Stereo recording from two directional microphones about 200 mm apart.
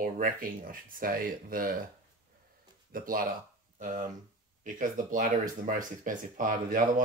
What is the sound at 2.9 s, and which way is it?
Speech, 45° right (ahead or behind).